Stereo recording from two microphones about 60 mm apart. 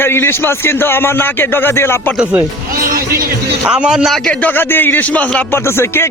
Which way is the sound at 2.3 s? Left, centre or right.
Right.